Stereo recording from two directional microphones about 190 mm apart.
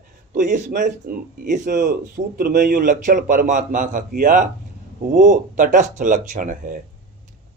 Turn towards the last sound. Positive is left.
turn(degrees=-45)  # may be behind; listen again after turning